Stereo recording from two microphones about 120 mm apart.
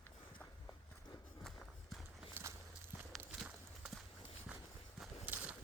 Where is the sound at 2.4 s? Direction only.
15° right (ahead or behind).